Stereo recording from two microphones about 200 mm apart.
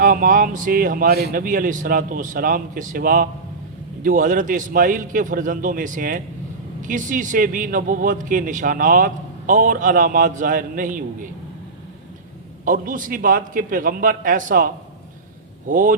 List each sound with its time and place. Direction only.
0.0 s a man's voice: 40° right (ahead or behind)
12.6 s a man's voice: 40° right (ahead or behind)